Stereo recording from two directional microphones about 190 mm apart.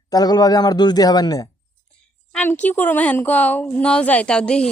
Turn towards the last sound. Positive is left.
turn(degrees=5)  # may be behind; listen again after turning